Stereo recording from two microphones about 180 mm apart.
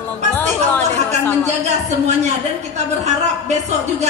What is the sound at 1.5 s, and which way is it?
A woman's voice, 40° right (ahead or behind).